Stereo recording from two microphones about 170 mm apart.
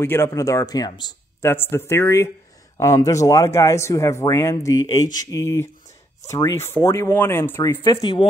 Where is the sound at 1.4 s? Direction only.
15° left (ahead or behind).